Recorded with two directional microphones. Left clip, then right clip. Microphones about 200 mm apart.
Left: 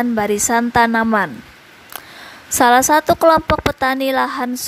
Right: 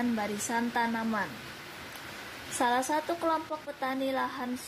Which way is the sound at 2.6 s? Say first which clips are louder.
Left 17 dB; 40° left (ahead or behind).